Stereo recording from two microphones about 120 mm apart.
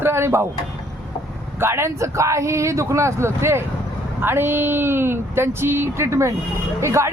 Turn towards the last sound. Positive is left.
turn(degrees=-25)  # may be behind; listen again after turning